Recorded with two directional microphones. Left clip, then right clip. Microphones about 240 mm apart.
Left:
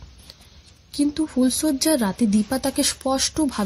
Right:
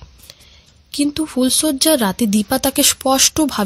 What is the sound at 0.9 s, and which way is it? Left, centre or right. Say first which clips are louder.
Speech: right 4 dB; right.